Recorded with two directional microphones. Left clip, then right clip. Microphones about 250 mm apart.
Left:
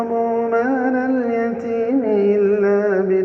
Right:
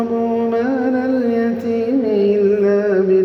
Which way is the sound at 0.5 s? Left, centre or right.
Right.